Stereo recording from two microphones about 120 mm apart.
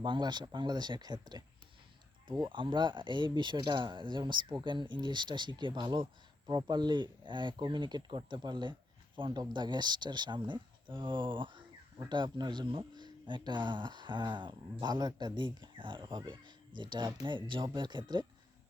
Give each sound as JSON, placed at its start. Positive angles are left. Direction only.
{"t": 0.0, "sound": "speech", "side_deg": -40}